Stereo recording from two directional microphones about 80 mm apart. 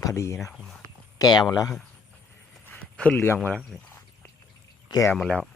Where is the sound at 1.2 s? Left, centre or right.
Left.